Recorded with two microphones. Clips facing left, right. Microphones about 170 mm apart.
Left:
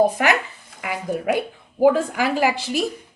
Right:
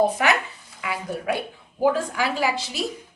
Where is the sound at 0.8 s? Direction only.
45° left (ahead or behind).